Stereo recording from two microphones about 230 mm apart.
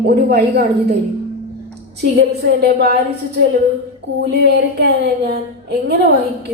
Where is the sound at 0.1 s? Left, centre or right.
Right.